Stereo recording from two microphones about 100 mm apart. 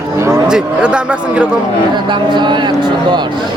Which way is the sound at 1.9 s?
50° right (ahead or behind).